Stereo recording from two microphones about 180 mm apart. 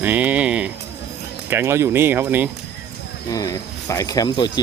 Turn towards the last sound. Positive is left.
turn(degrees=25)  # may be behind; listen again after turning